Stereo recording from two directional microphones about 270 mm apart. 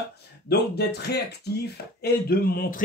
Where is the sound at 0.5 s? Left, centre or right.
Left.